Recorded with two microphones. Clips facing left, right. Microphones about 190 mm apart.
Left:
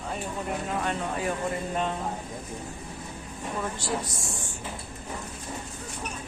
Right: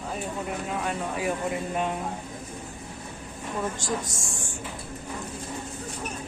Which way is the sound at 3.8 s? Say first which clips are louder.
Even; 45° right (ahead or behind).